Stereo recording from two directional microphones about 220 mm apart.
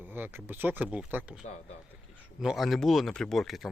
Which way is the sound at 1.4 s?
35° left (ahead or behind).